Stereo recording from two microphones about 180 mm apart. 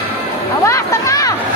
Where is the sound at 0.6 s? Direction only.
15° left (ahead or behind).